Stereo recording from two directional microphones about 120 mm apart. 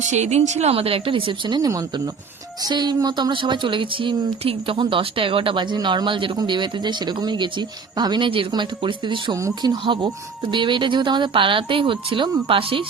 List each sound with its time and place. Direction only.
0.1 s speech: 70° right (ahead or behind); by 9.3 s 45° right (ahead or behind)
9.3 s speech: 30° right (ahead or behind)
9.8 s speech: 45° right (ahead or behind)